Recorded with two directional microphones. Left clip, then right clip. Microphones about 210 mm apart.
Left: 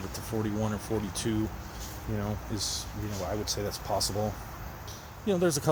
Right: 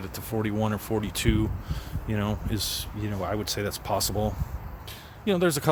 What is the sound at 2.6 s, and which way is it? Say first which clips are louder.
Speech: right 3 dB; 55° right (ahead or behind).